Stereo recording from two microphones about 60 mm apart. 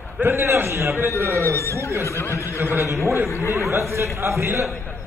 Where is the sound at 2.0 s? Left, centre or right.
Left.